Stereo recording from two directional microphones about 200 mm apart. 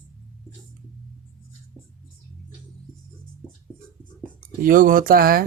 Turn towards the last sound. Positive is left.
turn(degrees=-45)  # may be behind; listen again after turning